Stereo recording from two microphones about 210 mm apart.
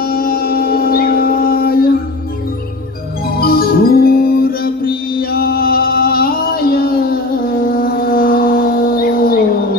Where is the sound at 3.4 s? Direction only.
45° left (ahead or behind).